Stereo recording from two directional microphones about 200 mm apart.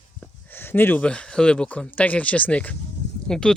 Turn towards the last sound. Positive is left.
turn(degrees=5)  # may be behind; listen again after turning